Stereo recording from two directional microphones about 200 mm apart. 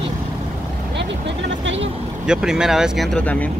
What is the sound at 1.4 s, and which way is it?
Speech, 65° right (ahead or behind).